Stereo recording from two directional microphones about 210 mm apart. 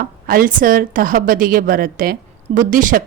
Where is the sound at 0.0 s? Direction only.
40° right (ahead or behind).